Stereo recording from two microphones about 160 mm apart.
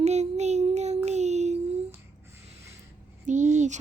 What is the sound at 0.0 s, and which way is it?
Child singing, 45° right (ahead or behind).